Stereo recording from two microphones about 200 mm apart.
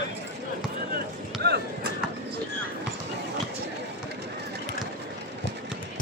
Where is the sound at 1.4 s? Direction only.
50° right (ahead or behind).